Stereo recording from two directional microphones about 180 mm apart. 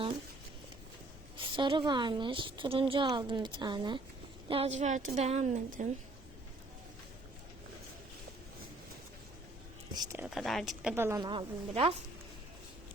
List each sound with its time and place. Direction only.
1.4 s a woman's voice: 25° right (ahead or behind); by 5.9 s 40° right (ahead or behind)
9.9 s a woman's voice: 20° right (ahead or behind)
10.2 s speech: centre (ahead or behind)
10.9 s a woman's voice: 15° right (ahead or behind)
11.2 s a woman's voice: 25° right (ahead or behind)